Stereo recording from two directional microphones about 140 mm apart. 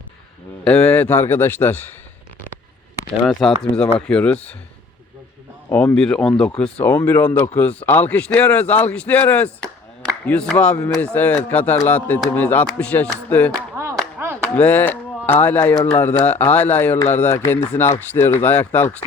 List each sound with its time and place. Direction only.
0.6 s speech: 10° left (ahead or behind)
3.2 s speech: 5° left (ahead or behind)
5.7 s speech: 10° left (ahead or behind)
14.2 s clapping: 15° right (ahead or behind)
14.5 s speech: 15° left (ahead or behind)